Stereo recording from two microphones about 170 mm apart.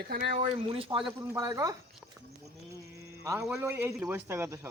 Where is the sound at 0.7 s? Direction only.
35° right (ahead or behind).